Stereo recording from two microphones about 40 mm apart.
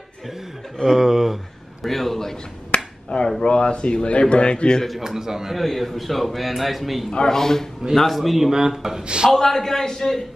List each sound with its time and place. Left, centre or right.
0.8 s a sound: centre
1.9 s a sound: centre
2.7 s finger snapping: left
3.3 s a man's voice: left
4.8 s a man's voice: centre
5.6 s a man's voice: centre
7.1 s a man's voice: centre
7.9 s a man's voice: centre
9.0 s a man's voice: right
9.3 s a man's voice: centre